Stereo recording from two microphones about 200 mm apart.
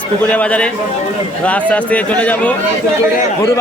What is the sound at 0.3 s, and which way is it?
A man's voice, 5° left (ahead or behind).